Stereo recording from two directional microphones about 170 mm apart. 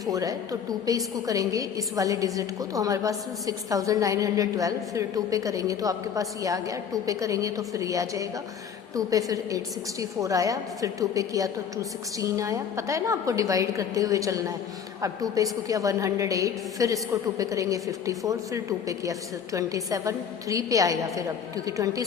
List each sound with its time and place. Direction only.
0.1 s a woman's voice: 20° right (ahead or behind)